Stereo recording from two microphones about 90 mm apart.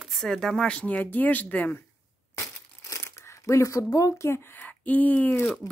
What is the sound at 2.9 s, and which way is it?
Speech, 35° left (ahead or behind).